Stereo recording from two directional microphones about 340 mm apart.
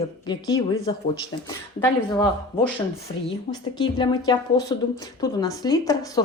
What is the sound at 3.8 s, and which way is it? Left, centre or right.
A woman's voice, centre.